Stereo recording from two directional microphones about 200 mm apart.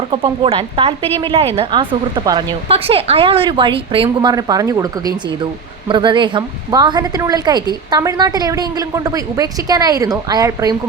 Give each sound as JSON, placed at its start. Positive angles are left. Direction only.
{"t": 0.1, "sound": "speech", "side_deg": -30}